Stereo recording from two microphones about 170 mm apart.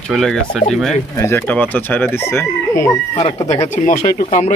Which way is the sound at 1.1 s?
15° left (ahead or behind).